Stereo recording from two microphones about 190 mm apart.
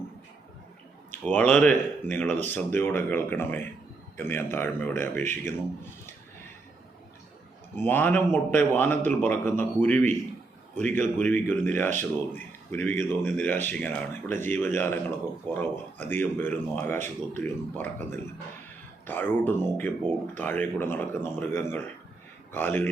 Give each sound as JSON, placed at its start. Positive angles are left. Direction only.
{"t": 1.1, "sound": "speech", "side_deg": 10}
{"t": 7.8, "sound": "speech", "side_deg": 10}